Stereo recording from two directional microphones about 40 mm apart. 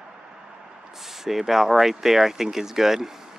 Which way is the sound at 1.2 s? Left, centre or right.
Centre.